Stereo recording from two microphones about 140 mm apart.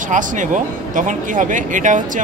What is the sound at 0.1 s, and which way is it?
Speech, 65° right (ahead or behind).